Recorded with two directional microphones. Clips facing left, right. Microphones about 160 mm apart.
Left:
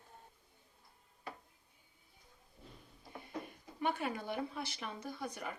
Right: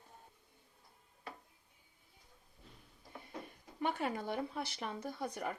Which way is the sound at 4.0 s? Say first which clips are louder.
Right 1 dB; 30° right (ahead or behind).